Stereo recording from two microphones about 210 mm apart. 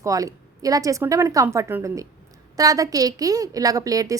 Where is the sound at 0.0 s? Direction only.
15° right (ahead or behind).